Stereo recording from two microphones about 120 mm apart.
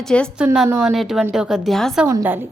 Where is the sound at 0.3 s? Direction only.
5° right (ahead or behind).